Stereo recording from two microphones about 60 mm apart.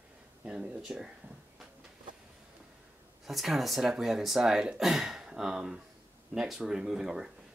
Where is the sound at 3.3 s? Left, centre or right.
Centre.